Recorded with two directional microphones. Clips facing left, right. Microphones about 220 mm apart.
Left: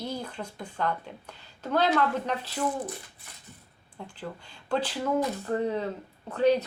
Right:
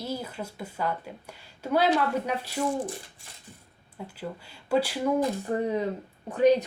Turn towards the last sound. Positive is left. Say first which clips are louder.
# right 3 dB
turn(degrees=-15)  # may be behind; listen again after turning